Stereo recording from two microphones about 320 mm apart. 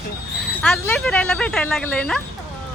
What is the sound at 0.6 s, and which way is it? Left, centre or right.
Speech, centre.